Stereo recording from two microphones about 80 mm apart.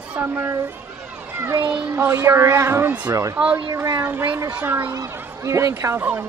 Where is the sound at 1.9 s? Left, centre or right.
Right.